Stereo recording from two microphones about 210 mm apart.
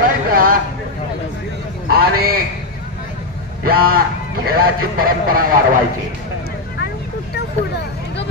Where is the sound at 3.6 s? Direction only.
45° right (ahead or behind).